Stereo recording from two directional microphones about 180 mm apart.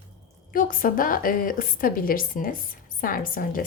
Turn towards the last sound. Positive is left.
turn(degrees=50)  # may be behind; listen again after turning